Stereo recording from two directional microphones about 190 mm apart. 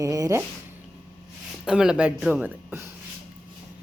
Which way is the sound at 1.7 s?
5° right (ahead or behind).